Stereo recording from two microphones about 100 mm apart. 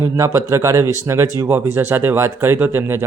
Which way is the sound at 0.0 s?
30° right (ahead or behind).